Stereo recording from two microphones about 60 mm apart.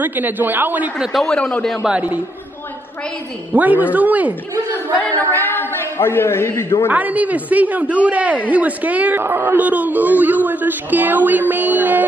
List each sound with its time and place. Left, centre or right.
0.0 s a man's voice: right
1.1 s a man's voice: centre
1.4 s a man's voice: centre
1.9 s speech: right
3.5 s speech: right
4.9 s a man's voice: left
6.9 s speech: right